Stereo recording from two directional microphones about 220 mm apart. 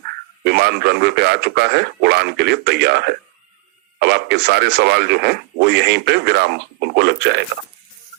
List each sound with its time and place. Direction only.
0.4 s speech: 50° right (ahead or behind)